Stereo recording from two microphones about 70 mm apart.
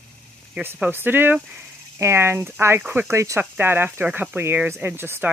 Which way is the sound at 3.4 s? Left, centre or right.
Right.